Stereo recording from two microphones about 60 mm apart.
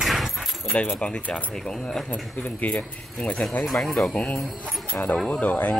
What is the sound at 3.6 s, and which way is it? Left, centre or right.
Speech, centre.